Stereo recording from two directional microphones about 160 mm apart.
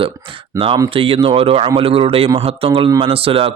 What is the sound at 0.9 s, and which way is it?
Speech, 35° right (ahead or behind).